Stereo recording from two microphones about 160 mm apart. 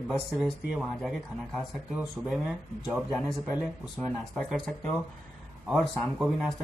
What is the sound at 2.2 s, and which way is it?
Speech, centre (ahead or behind).